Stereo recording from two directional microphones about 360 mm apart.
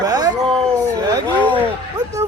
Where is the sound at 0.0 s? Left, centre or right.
Centre.